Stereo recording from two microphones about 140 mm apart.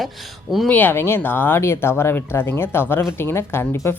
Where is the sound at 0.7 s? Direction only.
15° left (ahead or behind).